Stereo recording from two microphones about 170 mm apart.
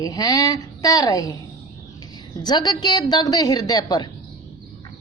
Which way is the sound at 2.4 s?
25° left (ahead or behind).